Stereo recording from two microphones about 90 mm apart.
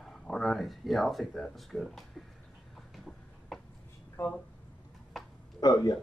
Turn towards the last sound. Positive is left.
turn(degrees=45)  # may be behind; listen again after turning